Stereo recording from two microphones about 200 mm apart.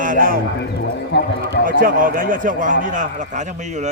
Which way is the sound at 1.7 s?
45° right (ahead or behind).